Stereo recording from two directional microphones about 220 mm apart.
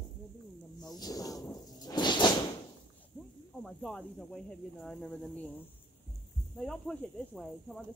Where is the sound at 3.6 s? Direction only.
Centre (ahead or behind).